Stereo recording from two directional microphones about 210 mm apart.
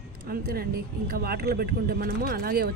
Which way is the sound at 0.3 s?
45° right (ahead or behind).